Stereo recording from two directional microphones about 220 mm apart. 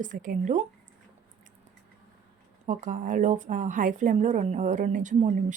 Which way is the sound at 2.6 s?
35° right (ahead or behind).